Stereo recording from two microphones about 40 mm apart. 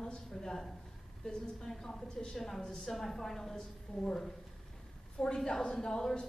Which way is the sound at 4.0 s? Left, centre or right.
Left.